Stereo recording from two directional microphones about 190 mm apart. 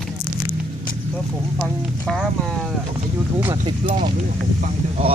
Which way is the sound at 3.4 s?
25° right (ahead or behind).